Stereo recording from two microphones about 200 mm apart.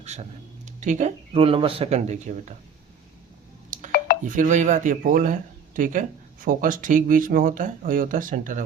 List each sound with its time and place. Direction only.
0.0 s speech: 35° right (ahead or behind)
3.7 s a sound: 40° right (ahead or behind)
4.2 s speech: 40° right (ahead or behind)